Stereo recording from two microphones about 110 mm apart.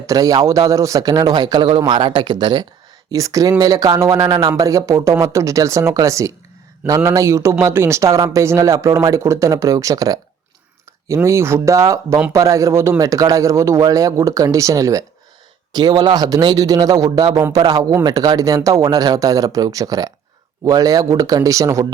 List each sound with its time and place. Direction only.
0.0 s speech: 30° right (ahead or behind)
3.1 s speech: 30° right (ahead or behind)